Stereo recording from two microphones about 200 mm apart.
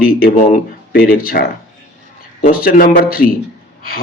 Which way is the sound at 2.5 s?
45° left (ahead or behind).